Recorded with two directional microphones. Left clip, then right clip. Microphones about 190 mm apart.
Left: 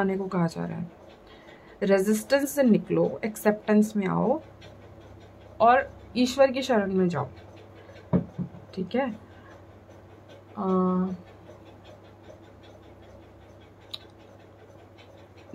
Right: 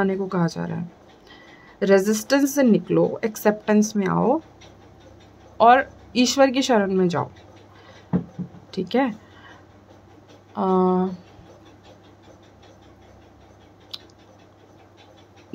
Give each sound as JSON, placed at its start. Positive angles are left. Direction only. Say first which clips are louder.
{"t": 0.0, "sound": "speech", "louder": "right 4 dB", "side_deg": -15}
{"t": 1.8, "sound": "speech", "louder": "right 5 dB", "side_deg": -20}
{"t": 5.6, "sound": "speech", "louder": "right 5 dB", "side_deg": -20}
{"t": 8.7, "sound": "speech", "louder": "right 6 dB", "side_deg": -25}
{"t": 10.5, "sound": "speech", "louder": "right 7 dB", "side_deg": -25}